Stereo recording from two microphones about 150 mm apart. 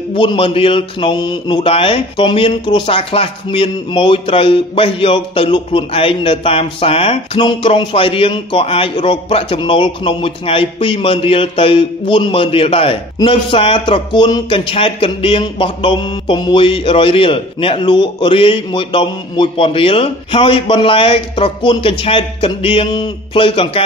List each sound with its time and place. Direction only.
0.1 s a man's voice: 35° left (ahead or behind)